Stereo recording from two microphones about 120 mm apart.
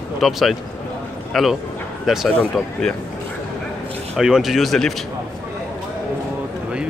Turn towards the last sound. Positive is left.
turn(degrees=0)  # may be behind; listen again after turning